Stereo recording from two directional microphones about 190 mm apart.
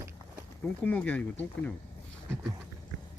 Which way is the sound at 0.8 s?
10° left (ahead or behind).